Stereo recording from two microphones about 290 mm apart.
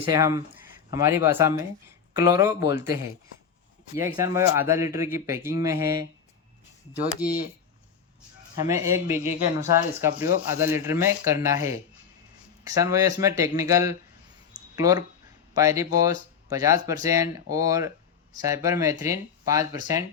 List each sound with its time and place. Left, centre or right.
0.1 s speech: centre
3.9 s speech: centre
7.2 s speech: centre
8.6 s speech: centre
14.5 s a sound: centre
15.5 s speech: centre